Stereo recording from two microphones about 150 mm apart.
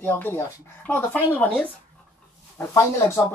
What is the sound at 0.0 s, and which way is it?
Speech, 15° left (ahead or behind).